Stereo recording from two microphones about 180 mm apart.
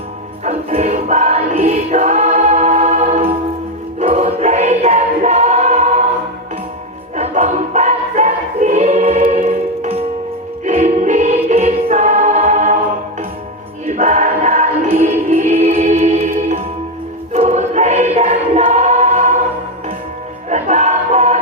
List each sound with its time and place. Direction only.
0.4 s music: 35° right (ahead or behind)
4.0 s choir: 40° right (ahead or behind)
7.2 s choir: 40° right (ahead or behind)
10.7 s music: 40° right (ahead or behind)
13.8 s choir: 40° right (ahead or behind)
15.3 s music: 40° right (ahead or behind)
17.3 s choir: 40° right (ahead or behind)
20.5 s choir: 40° right (ahead or behind)